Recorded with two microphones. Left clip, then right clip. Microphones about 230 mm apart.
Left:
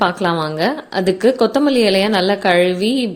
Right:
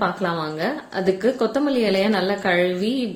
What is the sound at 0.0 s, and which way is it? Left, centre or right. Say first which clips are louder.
A woman's voice: left 6 dB; left.